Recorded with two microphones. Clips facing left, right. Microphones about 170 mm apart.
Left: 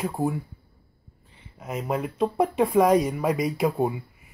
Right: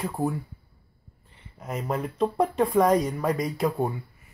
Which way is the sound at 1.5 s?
5° left (ahead or behind).